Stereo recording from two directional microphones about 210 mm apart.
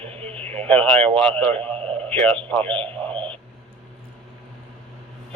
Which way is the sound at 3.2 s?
25° right (ahead or behind).